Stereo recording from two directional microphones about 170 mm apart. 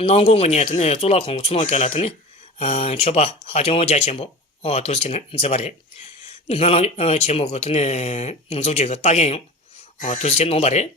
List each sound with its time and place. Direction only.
0.0 s speech: 35° left (ahead or behind)